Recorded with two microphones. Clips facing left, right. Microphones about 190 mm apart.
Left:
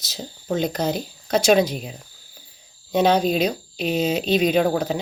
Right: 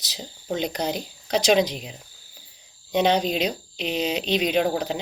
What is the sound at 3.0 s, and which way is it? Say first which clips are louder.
Speech: left 3 dB; 45° left (ahead or behind).